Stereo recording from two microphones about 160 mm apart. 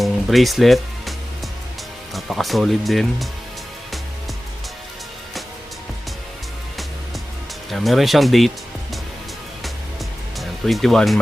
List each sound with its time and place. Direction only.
0.0 s music: centre (ahead or behind)
2.1 s speech: centre (ahead or behind)
7.7 s speech: centre (ahead or behind)
10.3 s speech: centre (ahead or behind)